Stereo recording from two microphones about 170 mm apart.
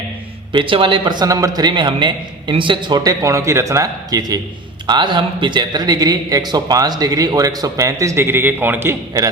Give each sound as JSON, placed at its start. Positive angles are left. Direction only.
{"t": 0.5, "sound": "speech", "side_deg": -30}